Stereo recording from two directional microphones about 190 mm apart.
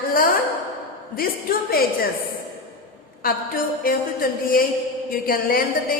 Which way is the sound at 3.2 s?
50° left (ahead or behind).